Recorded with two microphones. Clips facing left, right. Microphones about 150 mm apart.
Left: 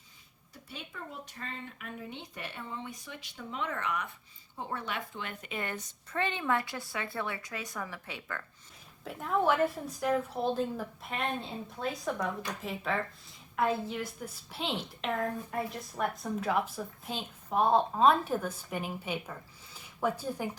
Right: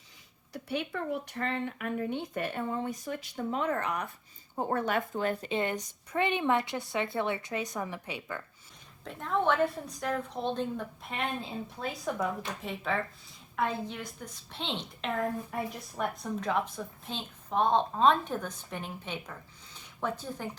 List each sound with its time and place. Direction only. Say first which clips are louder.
0.5 s a woman's voice: right 12 dB; 70° right (ahead or behind); by 8.4 s 15° right (ahead or behind)
9.0 s a woman's voice: even; 5° left (ahead or behind)